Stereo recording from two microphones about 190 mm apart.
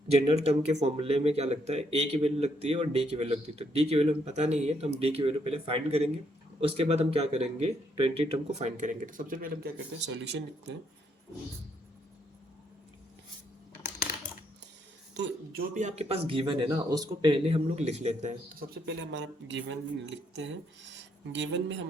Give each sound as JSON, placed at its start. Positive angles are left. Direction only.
{"t": 0.1, "sound": "speech", "side_deg": -35}
{"t": 10.0, "sound": "speech", "side_deg": -70}
{"t": 15.1, "sound": "speech", "side_deg": -60}
{"t": 18.9, "sound": "speech", "side_deg": -65}